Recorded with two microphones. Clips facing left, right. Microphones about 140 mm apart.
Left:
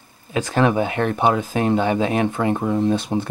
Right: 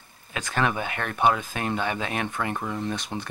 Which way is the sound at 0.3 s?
20° left (ahead or behind).